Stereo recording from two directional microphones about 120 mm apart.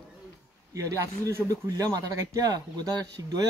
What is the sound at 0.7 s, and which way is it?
Speech, 25° right (ahead or behind).